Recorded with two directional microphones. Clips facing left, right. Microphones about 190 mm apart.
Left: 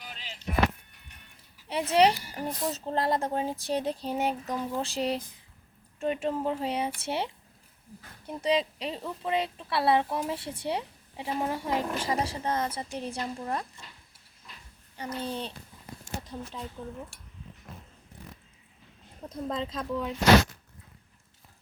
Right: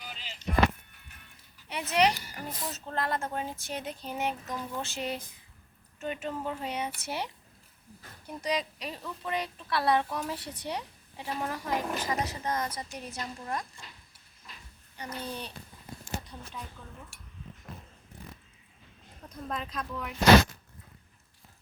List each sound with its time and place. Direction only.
0.0 s music: centre (ahead or behind)
1.6 s a child's voice: 30° left (ahead or behind)
2.5 s speech: centre (ahead or behind)
2.7 s speech: 30° left (ahead or behind)
8.3 s a woman's voice: 25° left (ahead or behind)
14.9 s a woman's voice: 25° left (ahead or behind)
16.8 s speech: 30° left (ahead or behind)
19.3 s a woman's voice: 25° left (ahead or behind)